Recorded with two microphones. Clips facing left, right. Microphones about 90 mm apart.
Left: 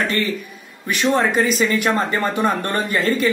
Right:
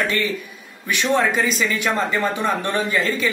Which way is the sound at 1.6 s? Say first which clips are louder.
Left 3 dB; 45° left (ahead or behind).